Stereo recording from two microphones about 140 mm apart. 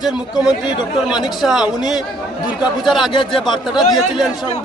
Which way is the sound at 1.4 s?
Centre (ahead or behind).